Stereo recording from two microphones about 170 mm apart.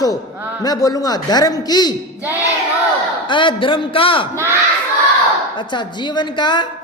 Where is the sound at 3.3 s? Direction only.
30° left (ahead or behind).